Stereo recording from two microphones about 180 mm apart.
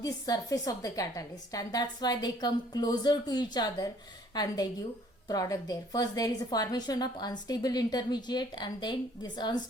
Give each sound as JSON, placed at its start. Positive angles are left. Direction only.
{"t": 0.0, "sound": "a woman's voice", "side_deg": 20}
{"t": 5.3, "sound": "a woman's voice", "side_deg": 20}